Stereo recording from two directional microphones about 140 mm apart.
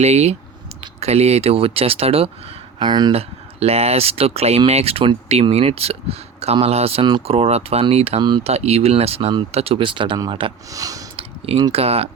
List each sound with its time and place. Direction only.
0.0 s speech: 50° right (ahead or behind)
2.7 s speech: 30° right (ahead or behind)
3.1 s speech: 45° right (ahead or behind)
10.7 s speech: 25° right (ahead or behind)
11.2 s speech: 40° right (ahead or behind)